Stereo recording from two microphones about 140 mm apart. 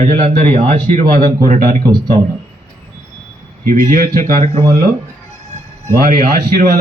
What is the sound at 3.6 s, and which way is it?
Speech, 90° right.